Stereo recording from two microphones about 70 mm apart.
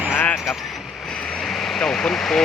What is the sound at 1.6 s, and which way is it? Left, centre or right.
Vehicle, centre.